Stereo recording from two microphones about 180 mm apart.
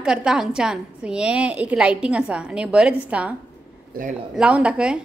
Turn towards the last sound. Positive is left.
turn(degrees=-5)  # may be behind; listen again after turning